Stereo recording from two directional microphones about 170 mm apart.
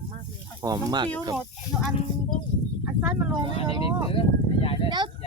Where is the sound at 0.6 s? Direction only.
20° right (ahead or behind).